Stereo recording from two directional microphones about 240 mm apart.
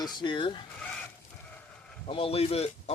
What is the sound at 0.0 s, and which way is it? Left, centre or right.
Speech, centre.